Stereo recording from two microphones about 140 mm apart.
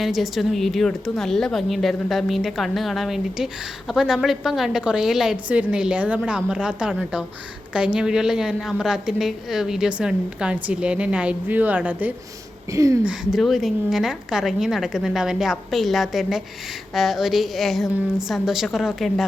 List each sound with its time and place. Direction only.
0.0 s a woman's voice: centre (ahead or behind)
12.7 s speech: 25° right (ahead or behind)
13.1 s a woman's voice: centre (ahead or behind)